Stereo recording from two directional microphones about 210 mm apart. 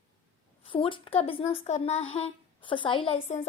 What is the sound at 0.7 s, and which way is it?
A woman's voice, 25° left (ahead or behind).